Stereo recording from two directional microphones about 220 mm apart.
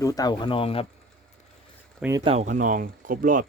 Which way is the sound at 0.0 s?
15° left (ahead or behind).